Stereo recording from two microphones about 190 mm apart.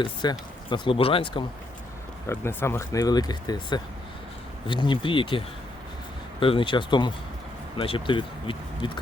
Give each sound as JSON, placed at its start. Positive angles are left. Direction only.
{"t": 0.0, "sound": "speech", "side_deg": 25}
{"t": 2.2, "sound": "speech", "side_deg": 10}
{"t": 6.4, "sound": "speech", "side_deg": 25}